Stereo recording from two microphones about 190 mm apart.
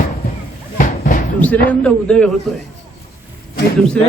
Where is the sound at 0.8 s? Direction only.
45° left (ahead or behind).